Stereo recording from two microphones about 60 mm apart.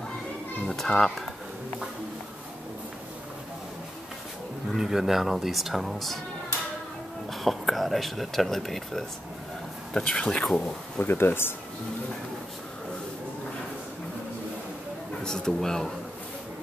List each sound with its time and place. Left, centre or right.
0.7 s speech: centre
4.7 s speech: centre
7.2 s speech: centre
9.9 s a man's voice: centre
10.6 s speech: left
15.2 s a man's voice: centre